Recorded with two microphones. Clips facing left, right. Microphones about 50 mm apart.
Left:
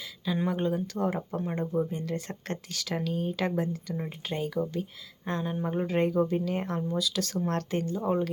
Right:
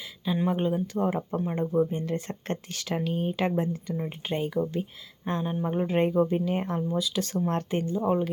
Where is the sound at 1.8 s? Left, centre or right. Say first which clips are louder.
Right 3 dB; right.